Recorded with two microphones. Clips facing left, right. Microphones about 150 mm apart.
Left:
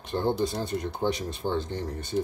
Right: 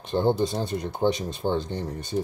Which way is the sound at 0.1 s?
20° right (ahead or behind).